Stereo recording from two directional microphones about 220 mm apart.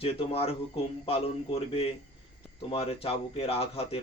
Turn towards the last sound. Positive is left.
turn(degrees=25)  # may be behind; listen again after turning